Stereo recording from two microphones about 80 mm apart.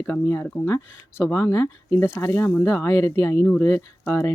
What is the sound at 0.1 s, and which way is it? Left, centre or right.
Speech, left.